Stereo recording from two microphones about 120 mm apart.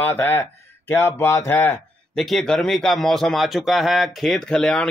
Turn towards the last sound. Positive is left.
turn(degrees=5)  # may be behind; listen again after turning